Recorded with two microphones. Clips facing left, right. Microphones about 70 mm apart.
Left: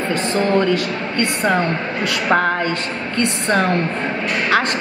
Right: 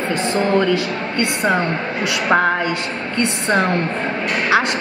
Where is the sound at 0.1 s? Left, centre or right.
Right.